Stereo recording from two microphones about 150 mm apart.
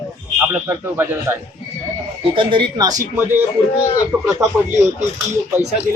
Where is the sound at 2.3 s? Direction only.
35° right (ahead or behind).